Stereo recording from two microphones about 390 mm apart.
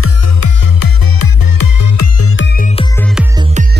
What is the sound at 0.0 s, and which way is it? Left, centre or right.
Music, left.